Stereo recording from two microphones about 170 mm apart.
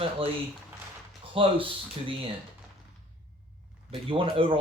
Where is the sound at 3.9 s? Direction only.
30° right (ahead or behind).